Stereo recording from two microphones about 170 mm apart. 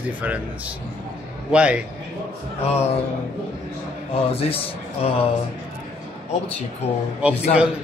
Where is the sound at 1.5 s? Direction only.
5° right (ahead or behind).